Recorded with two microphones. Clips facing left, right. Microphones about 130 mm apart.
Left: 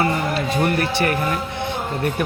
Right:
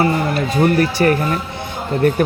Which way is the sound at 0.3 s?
40° right (ahead or behind).